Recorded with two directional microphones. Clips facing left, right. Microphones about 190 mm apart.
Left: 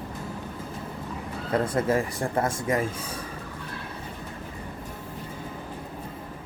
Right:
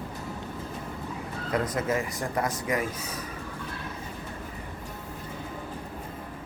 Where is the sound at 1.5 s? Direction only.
30° left (ahead or behind).